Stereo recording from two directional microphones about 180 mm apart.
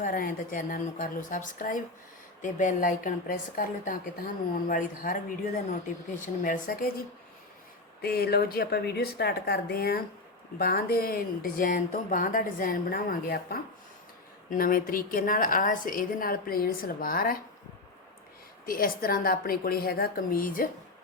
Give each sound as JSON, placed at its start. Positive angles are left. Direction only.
{"t": 0.0, "sound": "speech", "side_deg": 50}
{"t": 6.1, "sound": "speech", "side_deg": 45}
{"t": 8.0, "sound": "a woman's voice", "side_deg": 60}
{"t": 18.6, "sound": "a woman's voice", "side_deg": 55}